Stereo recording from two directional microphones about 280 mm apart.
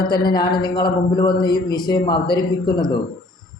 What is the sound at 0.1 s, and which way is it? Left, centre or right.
A man's voice, centre.